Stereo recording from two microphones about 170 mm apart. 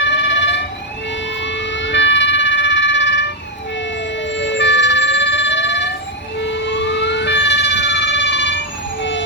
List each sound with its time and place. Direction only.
0.0 s emergency vehicle: 90° left
4.3 s emergency vehicle: 90° left